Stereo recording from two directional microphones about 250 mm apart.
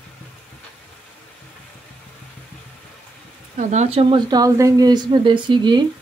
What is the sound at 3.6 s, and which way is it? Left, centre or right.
Speech, right.